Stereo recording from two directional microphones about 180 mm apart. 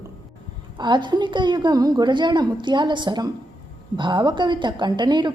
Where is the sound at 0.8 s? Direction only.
25° right (ahead or behind).